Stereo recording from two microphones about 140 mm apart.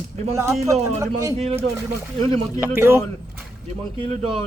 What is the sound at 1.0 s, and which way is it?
Speech, 20° right (ahead or behind).